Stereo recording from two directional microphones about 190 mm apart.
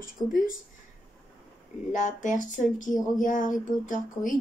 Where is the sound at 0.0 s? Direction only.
45° left (ahead or behind).